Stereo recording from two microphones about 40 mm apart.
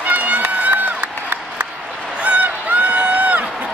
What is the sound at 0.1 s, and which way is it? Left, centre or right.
Run, right.